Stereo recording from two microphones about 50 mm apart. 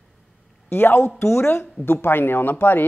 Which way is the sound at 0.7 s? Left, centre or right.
Left.